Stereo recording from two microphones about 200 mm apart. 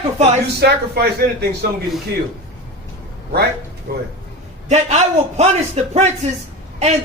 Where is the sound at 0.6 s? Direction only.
55° right (ahead or behind).